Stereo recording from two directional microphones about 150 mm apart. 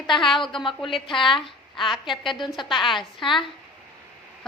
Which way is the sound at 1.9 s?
Centre (ahead or behind).